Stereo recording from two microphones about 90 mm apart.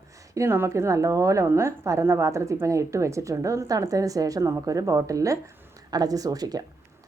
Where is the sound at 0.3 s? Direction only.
30° right (ahead or behind).